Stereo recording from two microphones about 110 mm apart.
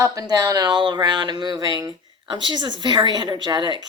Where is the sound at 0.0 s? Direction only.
35° right (ahead or behind).